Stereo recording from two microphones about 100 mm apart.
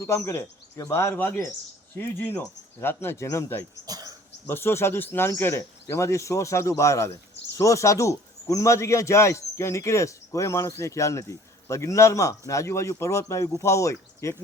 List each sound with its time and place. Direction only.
0.0 s speech: 25° left (ahead or behind)
3.8 s a sound: 40° right (ahead or behind)
4.4 s a man's voice: 25° left (ahead or behind)